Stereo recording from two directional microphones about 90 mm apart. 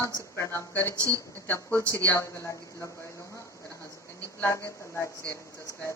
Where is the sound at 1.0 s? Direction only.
40° right (ahead or behind).